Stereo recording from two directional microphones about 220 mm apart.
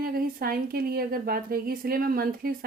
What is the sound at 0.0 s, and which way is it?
A woman's voice, 40° right (ahead or behind).